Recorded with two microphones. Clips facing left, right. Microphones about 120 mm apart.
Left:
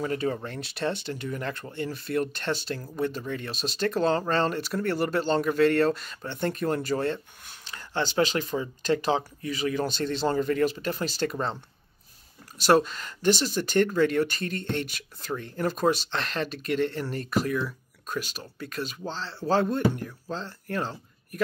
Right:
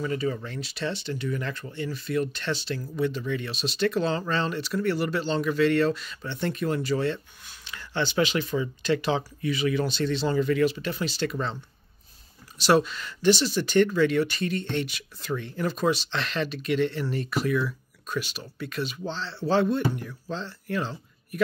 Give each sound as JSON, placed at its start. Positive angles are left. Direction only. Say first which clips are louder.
{"t": 0.0, "sound": "speech", "louder": "even", "side_deg": 55}
{"t": 12.6, "sound": "speech", "louder": "even", "side_deg": 45}